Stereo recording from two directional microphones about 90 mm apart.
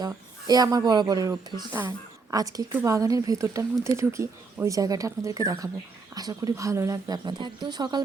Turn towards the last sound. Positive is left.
turn(degrees=-50)  # may be behind; listen again after turning